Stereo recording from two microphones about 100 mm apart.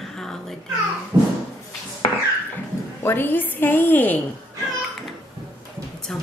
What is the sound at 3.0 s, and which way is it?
A woman's voice, 20° left (ahead or behind).